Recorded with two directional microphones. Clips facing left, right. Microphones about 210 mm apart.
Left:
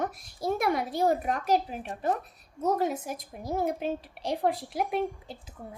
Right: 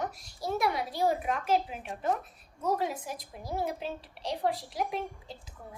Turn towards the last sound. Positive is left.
turn(degrees=55)  # may be behind; listen again after turning